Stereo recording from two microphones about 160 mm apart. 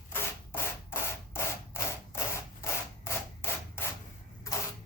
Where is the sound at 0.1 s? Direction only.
15° left (ahead or behind).